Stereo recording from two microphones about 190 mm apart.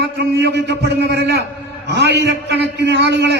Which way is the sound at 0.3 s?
65° right (ahead or behind).